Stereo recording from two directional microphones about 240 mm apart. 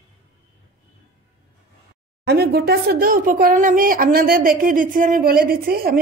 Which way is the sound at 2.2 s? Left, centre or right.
Right.